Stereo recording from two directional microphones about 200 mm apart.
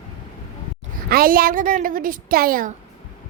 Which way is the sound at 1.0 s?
50° right (ahead or behind).